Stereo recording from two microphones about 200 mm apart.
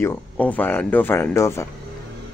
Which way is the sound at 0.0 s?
10° left (ahead or behind).